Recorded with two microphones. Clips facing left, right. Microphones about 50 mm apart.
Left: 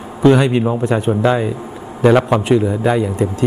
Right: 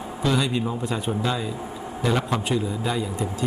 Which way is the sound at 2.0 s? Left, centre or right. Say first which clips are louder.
Left 12 dB; left.